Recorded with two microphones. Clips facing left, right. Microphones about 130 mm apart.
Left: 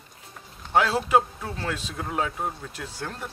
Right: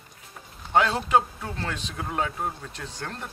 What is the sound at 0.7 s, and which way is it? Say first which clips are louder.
Speech: even; 5° left (ahead or behind).